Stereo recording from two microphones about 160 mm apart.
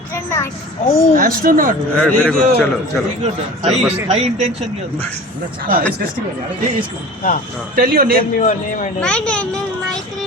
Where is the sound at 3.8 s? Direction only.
10° right (ahead or behind).